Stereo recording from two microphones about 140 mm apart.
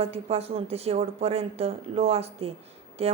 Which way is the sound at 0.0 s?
45° right (ahead or behind).